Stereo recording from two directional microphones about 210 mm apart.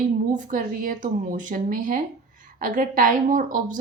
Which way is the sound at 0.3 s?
40° right (ahead or behind).